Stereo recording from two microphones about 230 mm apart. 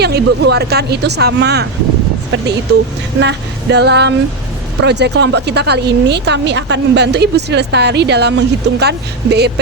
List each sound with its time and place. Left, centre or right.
0.0 s speech: right
3.2 s speech: right